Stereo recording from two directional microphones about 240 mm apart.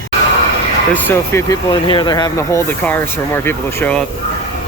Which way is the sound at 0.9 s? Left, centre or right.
Centre.